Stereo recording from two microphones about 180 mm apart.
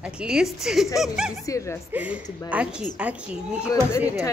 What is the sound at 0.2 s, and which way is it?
A woman's voice, 5° right (ahead or behind).